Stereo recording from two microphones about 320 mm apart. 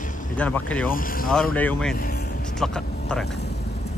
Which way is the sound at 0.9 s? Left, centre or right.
Left.